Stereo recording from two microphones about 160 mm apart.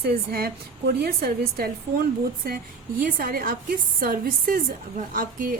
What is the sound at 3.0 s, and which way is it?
A woman's voice, 65° right (ahead or behind).